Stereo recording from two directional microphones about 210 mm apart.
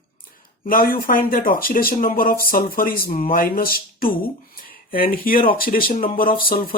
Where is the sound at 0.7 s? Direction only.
40° left (ahead or behind).